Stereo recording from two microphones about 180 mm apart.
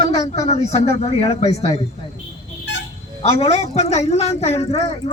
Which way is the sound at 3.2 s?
35° left (ahead or behind).